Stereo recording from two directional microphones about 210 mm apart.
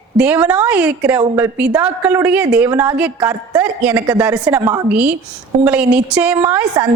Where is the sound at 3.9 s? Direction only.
15° right (ahead or behind).